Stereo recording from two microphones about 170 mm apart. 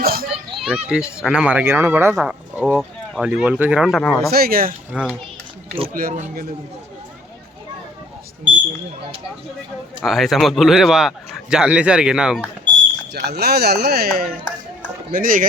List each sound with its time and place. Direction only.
0.0 s children playing: 60° right (ahead or behind)
0.5 s speech: 5° right (ahead or behind)
4.3 s speech: 65° right (ahead or behind)
4.9 s speech: centre (ahead or behind)
5.9 s speech: 55° right (ahead or behind)
10.0 s speech: centre (ahead or behind)
13.1 s speech: 75° right (ahead or behind); by 15.4 s 55° right (ahead or behind)